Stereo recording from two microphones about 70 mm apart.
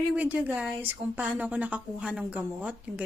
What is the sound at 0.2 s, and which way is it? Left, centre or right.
Speech, right.